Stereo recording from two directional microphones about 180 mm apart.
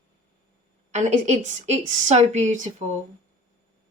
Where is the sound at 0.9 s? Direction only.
40° right (ahead or behind).